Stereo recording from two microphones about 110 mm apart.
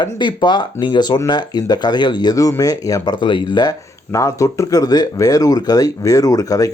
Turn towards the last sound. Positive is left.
turn(degrees=30)  # may be behind; listen again after turning